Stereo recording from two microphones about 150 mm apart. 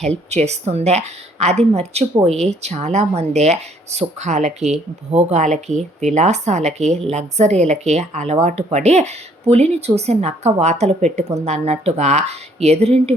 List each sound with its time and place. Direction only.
0.3 s speech: 45° right (ahead or behind)